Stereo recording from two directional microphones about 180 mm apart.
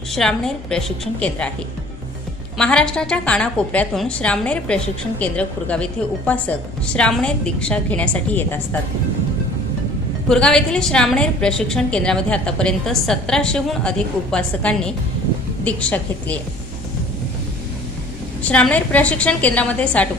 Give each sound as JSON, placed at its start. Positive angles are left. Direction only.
{"t": 0.1, "sound": "a woman's voice", "side_deg": 0}
{"t": 2.6, "sound": "a woman's voice", "side_deg": 5}
{"t": 10.2, "sound": "a woman's voice", "side_deg": 5}
{"t": 18.4, "sound": "a woman's voice", "side_deg": 5}